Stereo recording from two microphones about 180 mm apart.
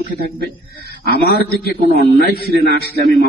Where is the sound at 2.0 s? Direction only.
60° left (ahead or behind).